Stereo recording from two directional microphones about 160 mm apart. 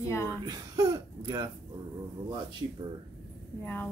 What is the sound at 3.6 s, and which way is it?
Speech, 10° left (ahead or behind).